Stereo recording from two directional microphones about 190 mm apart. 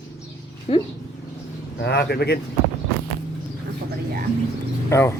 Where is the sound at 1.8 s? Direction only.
60° left (ahead or behind).